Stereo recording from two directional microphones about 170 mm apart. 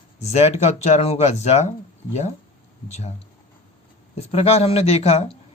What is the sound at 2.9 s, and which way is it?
Speech, 40° left (ahead or behind).